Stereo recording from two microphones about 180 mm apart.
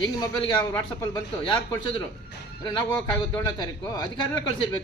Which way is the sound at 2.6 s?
25° left (ahead or behind).